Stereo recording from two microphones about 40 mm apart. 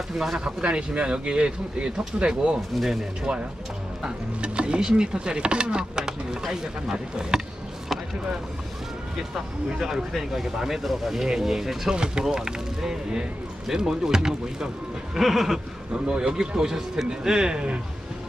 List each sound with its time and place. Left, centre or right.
0.3 s speech: right
2.7 s speech: centre
3.3 s speech: right
9.7 s speech: centre
11.9 s speech: right
15.1 s speech: centre
15.9 s speech: right